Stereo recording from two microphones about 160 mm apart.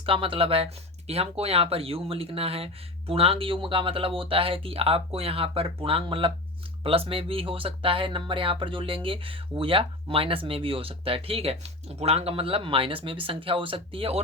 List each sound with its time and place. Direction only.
0.0 s speech: 35° right (ahead or behind)